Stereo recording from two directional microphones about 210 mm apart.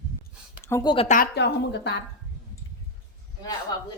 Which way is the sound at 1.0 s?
40° left (ahead or behind).